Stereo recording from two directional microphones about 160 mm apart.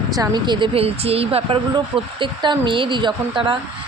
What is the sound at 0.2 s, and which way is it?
Speech, 25° right (ahead or behind).